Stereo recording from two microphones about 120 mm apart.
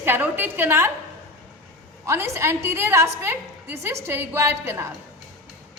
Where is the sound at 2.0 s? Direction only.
25° right (ahead or behind).